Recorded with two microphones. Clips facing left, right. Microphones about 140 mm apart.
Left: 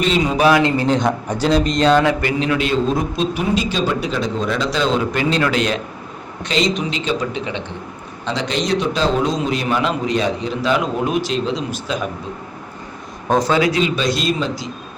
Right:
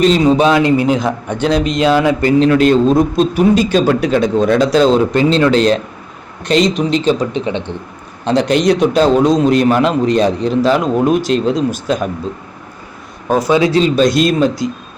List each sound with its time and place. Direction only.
0.0 s a man's voice: 40° right (ahead or behind)
0.3 s speech: 20° right (ahead or behind)
0.9 s a man's voice: 5° right (ahead or behind)
2.2 s a man's voice: 40° right (ahead or behind)
8.2 s a man's voice: 55° right (ahead or behind)
13.2 s speech: 5° right (ahead or behind)
13.5 s a man's voice: 30° right (ahead or behind); by 14.7 s 50° right (ahead or behind)